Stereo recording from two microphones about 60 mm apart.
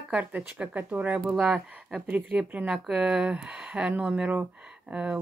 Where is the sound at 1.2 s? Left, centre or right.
Centre.